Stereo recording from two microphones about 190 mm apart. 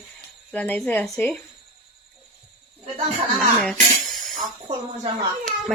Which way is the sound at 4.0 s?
Centre (ahead or behind).